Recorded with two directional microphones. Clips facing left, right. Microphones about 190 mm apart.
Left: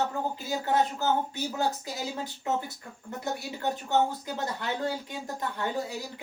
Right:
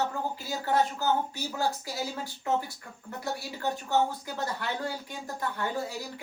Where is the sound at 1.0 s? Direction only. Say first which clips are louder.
Left 1 dB; 20° left (ahead or behind).